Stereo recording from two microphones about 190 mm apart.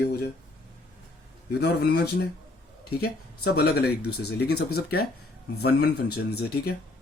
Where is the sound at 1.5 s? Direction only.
60° left (ahead or behind).